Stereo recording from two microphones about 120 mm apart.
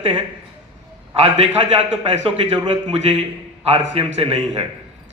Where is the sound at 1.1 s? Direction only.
55° right (ahead or behind).